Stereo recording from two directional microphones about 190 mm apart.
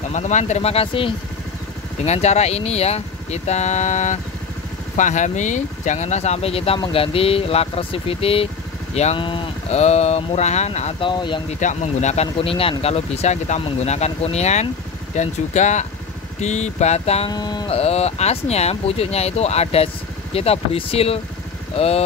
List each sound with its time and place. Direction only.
0.1 s speech: 40° left (ahead or behind)
11.6 s speech: 35° left (ahead or behind)
17.3 s speech: 20° left (ahead or behind)